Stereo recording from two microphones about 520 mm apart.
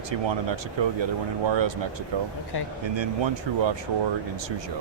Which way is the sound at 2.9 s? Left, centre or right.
Right.